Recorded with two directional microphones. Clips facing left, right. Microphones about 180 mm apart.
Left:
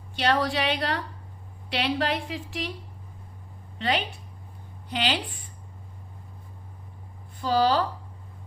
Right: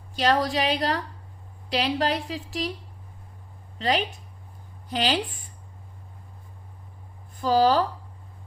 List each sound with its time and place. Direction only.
0.2 s a woman's voice: 40° right (ahead or behind)
3.8 s a woman's voice: 40° right (ahead or behind)
7.4 s speech: 45° right (ahead or behind)